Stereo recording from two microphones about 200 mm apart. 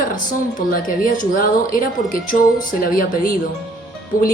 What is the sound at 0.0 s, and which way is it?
A woman's voice, 40° left (ahead or behind).